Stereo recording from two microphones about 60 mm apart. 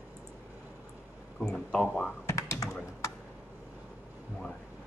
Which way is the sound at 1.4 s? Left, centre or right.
Centre.